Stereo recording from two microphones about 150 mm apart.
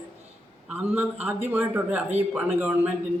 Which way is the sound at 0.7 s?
10° right (ahead or behind).